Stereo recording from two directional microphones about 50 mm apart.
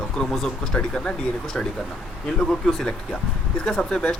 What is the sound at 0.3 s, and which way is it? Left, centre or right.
Speech, centre.